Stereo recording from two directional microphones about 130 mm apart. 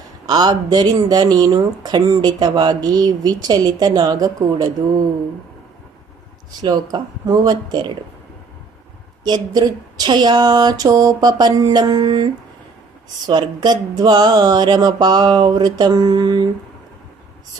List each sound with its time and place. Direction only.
0.3 s speech: 30° right (ahead or behind)
6.9 s speech: 30° right (ahead or behind)
9.2 s speech: 30° right (ahead or behind)